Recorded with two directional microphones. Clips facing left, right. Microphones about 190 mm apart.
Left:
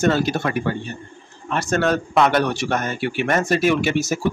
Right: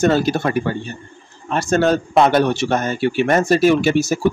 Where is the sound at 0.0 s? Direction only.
35° right (ahead or behind).